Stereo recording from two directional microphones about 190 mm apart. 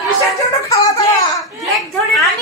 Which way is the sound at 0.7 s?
15° left (ahead or behind).